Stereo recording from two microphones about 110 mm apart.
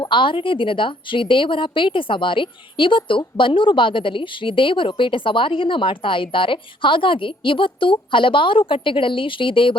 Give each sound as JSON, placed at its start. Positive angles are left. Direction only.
{"t": 0.0, "sound": "a woman's voice", "side_deg": 50}